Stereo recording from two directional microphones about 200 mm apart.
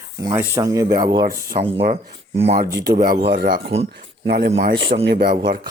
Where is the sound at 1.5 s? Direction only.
35° right (ahead or behind).